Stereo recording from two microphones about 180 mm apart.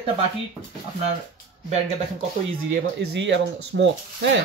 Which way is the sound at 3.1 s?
75° right (ahead or behind).